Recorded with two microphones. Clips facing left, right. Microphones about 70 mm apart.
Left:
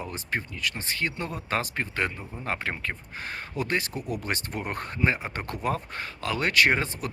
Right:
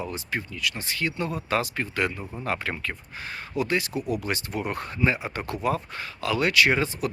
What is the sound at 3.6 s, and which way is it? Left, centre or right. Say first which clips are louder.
Speech: right 3 dB; left.